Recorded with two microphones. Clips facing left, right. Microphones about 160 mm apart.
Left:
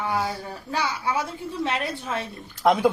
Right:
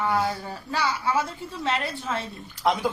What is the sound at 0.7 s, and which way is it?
A woman's voice, 15° left (ahead or behind).